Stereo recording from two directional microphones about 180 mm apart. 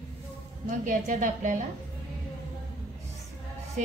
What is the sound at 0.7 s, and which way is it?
Speech, 45° right (ahead or behind).